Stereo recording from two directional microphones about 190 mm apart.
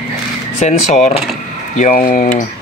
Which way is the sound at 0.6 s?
35° left (ahead or behind).